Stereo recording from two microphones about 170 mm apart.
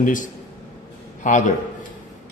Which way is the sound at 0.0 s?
50° left (ahead or behind).